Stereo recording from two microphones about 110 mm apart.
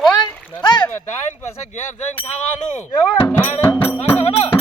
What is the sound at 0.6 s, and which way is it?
Rowboat, 40° left (ahead or behind).